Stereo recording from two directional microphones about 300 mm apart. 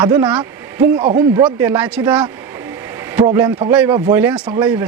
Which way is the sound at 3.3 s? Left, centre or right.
Centre.